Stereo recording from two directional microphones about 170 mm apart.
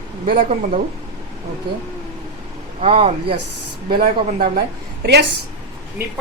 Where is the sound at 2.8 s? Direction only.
35° right (ahead or behind).